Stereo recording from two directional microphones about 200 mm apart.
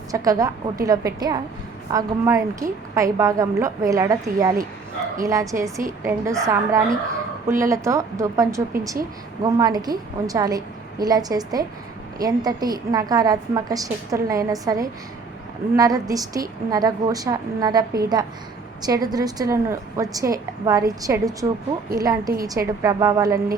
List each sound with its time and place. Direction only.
0.1 s a woman's voice: 15° right (ahead or behind)